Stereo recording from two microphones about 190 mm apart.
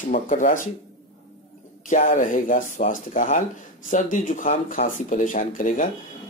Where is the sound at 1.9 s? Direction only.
40° left (ahead or behind).